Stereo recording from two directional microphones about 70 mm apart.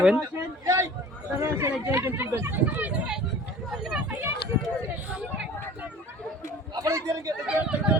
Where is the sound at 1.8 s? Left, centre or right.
Right.